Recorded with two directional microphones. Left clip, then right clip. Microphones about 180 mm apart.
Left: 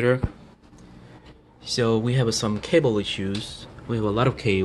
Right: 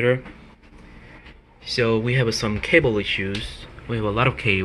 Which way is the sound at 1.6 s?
15° left (ahead or behind).